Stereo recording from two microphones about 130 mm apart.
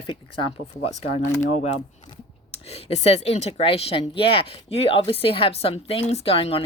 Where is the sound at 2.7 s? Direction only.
55° left (ahead or behind).